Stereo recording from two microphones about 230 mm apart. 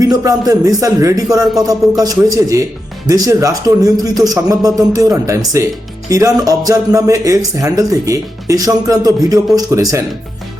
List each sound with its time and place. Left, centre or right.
0.0 s speech: centre